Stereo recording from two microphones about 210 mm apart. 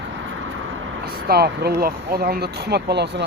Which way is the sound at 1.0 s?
45° right (ahead or behind).